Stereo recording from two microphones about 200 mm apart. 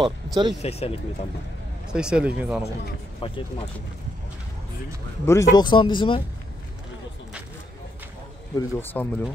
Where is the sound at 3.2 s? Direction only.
25° left (ahead or behind).